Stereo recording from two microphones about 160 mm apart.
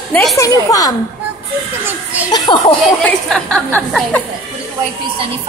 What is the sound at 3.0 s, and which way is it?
Speech, 5° left (ahead or behind).